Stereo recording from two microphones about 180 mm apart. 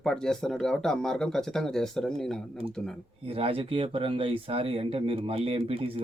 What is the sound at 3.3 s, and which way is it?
Speech, 30° right (ahead or behind).